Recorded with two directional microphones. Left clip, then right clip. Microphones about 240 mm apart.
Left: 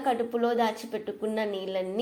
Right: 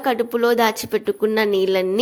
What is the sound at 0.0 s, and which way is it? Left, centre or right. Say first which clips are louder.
Speech: right 8 dB; right.